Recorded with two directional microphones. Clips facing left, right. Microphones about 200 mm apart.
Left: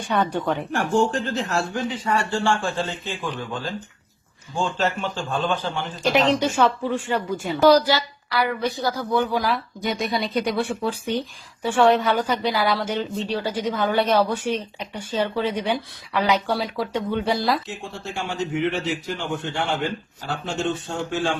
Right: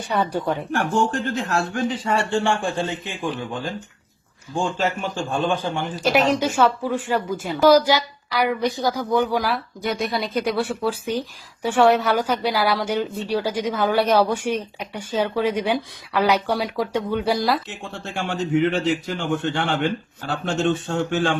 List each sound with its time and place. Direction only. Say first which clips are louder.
0.1 s a woman's voice: even; 5° right (ahead or behind)
0.9 s a man's voice: left 3 dB; 55° right (ahead or behind)
2.0 s speech: even; 25° right (ahead or behind)
4.5 s speech: right 1 dB; 10° right (ahead or behind)
17.3 s a woman's voice: right 1 dB; centre (ahead or behind)
18.1 s a man's voice: right 5 dB; 60° right (ahead or behind)